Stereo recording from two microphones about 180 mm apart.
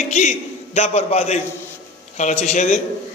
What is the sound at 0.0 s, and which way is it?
A man's voice, 40° left (ahead or behind).